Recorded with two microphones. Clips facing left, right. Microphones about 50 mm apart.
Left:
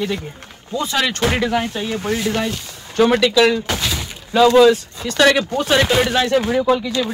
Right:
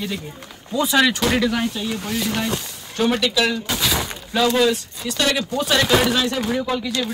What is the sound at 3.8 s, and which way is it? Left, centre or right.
Shatter, centre.